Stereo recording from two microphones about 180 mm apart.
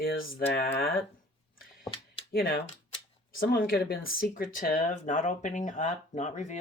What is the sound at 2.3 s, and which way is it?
Speech, 55° left (ahead or behind).